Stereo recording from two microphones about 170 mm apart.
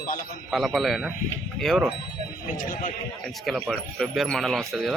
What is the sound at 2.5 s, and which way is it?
Speech, 55° left (ahead or behind).